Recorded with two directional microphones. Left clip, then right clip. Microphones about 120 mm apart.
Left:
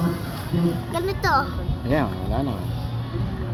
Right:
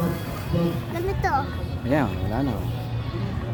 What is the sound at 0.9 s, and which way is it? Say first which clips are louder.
Speech: left 3 dB; 40° left (ahead or behind).